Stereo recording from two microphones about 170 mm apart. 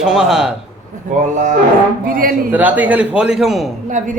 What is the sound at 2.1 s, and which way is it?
Speech, 55° right (ahead or behind).